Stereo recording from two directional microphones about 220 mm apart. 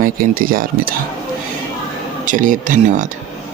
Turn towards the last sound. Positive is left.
turn(degrees=-35)  # may be behind; listen again after turning